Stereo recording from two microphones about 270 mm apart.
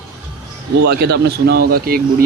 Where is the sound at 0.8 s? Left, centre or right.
Right.